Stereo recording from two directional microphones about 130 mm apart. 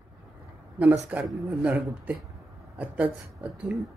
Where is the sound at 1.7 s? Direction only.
10° right (ahead or behind).